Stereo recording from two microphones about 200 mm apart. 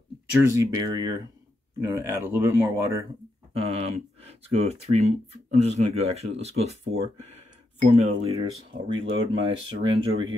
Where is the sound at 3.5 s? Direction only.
30° right (ahead or behind).